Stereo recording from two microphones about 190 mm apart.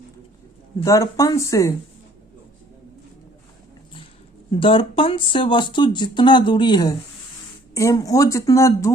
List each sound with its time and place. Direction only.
0.8 s speech: 15° left (ahead or behind)
4.6 s speech: 25° left (ahead or behind)